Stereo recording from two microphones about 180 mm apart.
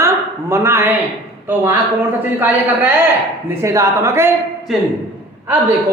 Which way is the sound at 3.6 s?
15° right (ahead or behind).